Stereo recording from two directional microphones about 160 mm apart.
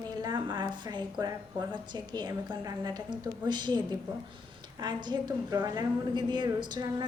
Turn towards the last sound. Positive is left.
turn(degrees=-25)  # may be behind; listen again after turning